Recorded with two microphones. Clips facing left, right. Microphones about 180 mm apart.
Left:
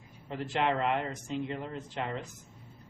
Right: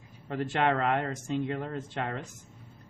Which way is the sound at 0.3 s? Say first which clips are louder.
Right 3 dB; 55° right (ahead or behind).